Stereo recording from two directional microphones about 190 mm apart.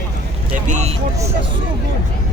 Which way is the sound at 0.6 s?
40° right (ahead or behind).